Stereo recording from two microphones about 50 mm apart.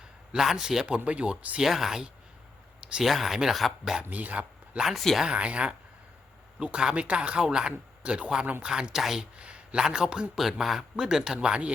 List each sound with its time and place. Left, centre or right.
0.0 s a man's voice: centre
0.9 s speech: right
1.5 s speech: centre
4.1 s speech: right
4.9 s speech: centre
5.2 s speech: right
9.3 s a man's voice: right
10.3 s speech: centre
10.8 s speech: centre